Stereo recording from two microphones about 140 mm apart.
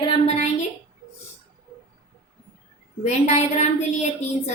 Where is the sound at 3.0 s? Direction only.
50° left (ahead or behind).